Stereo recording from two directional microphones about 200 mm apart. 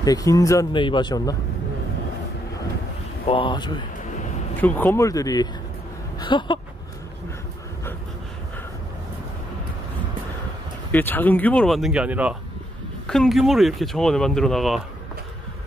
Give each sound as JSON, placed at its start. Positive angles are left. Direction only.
{"t": 0.0, "sound": "speech", "side_deg": 15}
{"t": 3.3, "sound": "speech", "side_deg": 25}
{"t": 4.6, "sound": "speech", "side_deg": 10}
{"t": 10.9, "sound": "speech", "side_deg": 10}